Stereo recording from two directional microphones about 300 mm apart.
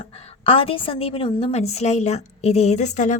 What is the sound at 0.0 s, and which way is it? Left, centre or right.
A woman's voice, centre.